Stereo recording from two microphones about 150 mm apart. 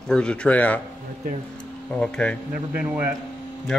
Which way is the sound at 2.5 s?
10° right (ahead or behind).